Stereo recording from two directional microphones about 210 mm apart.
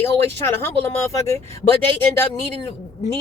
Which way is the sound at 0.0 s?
10° left (ahead or behind).